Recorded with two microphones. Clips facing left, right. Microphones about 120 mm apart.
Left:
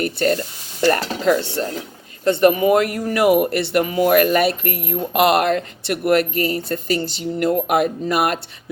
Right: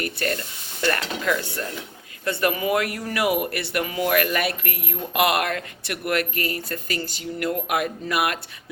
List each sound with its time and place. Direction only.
0.2 s speech: 30° left (ahead or behind)